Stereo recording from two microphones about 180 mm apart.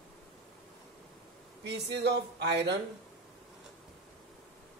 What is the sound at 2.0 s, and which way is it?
Speech, 75° right (ahead or behind).